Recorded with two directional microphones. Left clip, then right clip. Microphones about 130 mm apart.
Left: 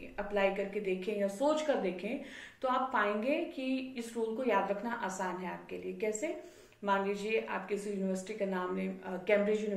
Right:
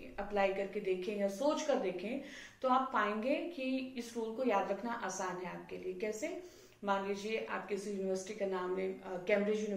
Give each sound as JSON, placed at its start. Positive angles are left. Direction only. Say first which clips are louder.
{"t": 0.3, "sound": "a woman's voice", "louder": "left 2 dB", "side_deg": 30}